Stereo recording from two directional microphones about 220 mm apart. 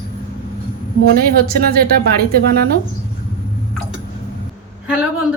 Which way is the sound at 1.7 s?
45° right (ahead or behind).